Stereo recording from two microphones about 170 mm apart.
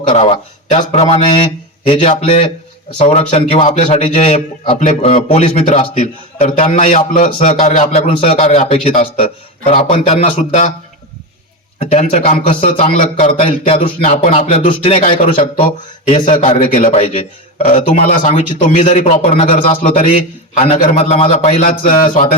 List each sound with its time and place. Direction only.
0.0 s a man's voice: 35° left (ahead or behind)
7.3 s a man's voice: 35° left (ahead or behind)
11.8 s a man's voice: 40° left (ahead or behind)
16.0 s a man's voice: 45° left (ahead or behind)